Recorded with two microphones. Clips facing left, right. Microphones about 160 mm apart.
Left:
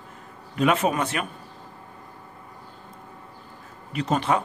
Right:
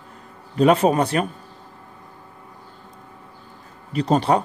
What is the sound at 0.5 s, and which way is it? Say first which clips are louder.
Speech: right 6 dB; 35° right (ahead or behind).